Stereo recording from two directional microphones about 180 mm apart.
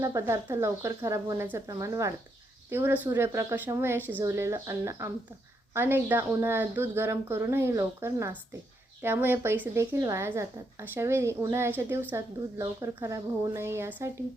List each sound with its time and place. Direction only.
0.0 s speech: 15° right (ahead or behind)